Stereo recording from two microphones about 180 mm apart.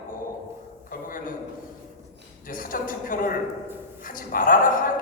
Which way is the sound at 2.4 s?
50° left (ahead or behind).